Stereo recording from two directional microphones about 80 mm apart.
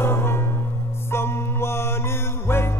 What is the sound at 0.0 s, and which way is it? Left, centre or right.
Music, left.